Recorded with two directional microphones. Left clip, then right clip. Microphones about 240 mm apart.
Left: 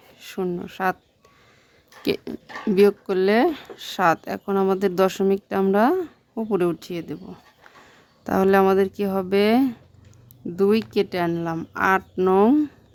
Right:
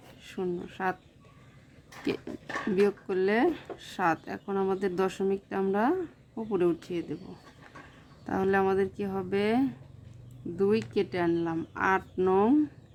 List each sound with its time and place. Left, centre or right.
0.2 s speech: left
2.0 s speech: left
8.2 s speech: left